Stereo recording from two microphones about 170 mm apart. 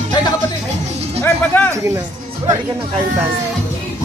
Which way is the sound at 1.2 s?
10° left (ahead or behind).